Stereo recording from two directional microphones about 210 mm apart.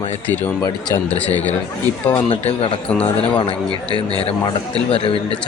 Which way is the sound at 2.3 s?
25° left (ahead or behind).